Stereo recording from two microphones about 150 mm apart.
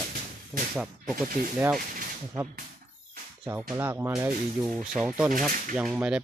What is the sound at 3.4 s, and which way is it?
Speech, 10° right (ahead or behind).